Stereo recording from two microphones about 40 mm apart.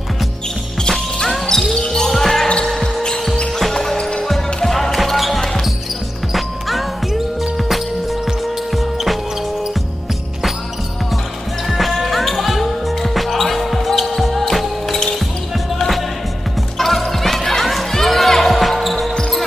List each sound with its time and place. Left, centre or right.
0.8 s music: centre
2.0 s basketball bounce: centre
3.7 s music: centre
4.6 s basketball bounce: centre
7.6 s music: centre
11.6 s music: centre
16.7 s music: centre